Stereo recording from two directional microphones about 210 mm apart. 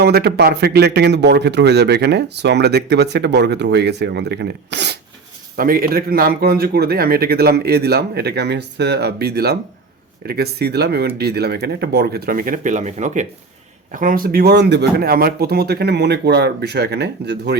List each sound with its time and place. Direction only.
0.0 s a man's voice: 50° right (ahead or behind)